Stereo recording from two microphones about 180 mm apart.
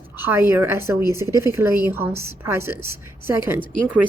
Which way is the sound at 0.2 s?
10° right (ahead or behind).